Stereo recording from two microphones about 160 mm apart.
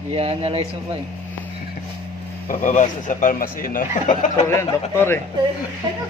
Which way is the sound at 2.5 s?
55° left (ahead or behind).